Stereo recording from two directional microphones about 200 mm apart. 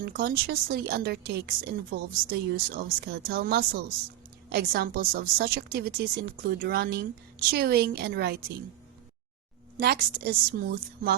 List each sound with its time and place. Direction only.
0.0 s a woman's voice: 55° right (ahead or behind)
9.7 s a woman's voice: 50° right (ahead or behind)